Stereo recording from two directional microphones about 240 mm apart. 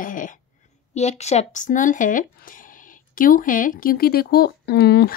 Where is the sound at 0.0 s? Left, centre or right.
Left.